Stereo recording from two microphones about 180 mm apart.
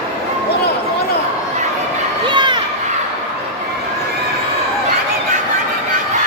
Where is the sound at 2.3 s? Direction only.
25° right (ahead or behind).